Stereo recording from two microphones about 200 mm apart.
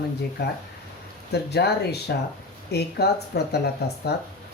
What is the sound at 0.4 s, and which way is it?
Speech, 55° left (ahead or behind).